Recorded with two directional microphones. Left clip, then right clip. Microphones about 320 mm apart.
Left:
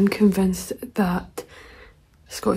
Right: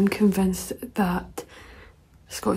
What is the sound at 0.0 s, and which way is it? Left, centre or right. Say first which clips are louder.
A woman's voice: left 3 dB; centre.